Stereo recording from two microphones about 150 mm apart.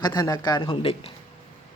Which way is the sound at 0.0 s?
25° left (ahead or behind).